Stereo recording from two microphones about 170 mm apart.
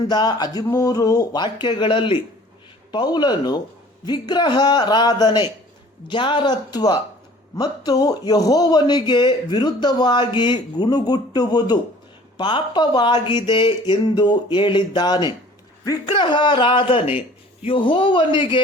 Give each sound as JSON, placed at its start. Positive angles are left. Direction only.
{"t": 0.1, "sound": "a man's voice", "side_deg": 25}